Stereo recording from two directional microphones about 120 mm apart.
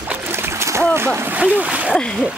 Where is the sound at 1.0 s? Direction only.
20° right (ahead or behind).